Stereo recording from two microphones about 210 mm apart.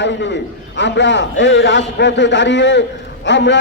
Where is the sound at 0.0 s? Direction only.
60° left (ahead or behind).